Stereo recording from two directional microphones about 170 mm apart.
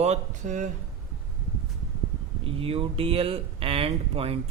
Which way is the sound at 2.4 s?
35° right (ahead or behind).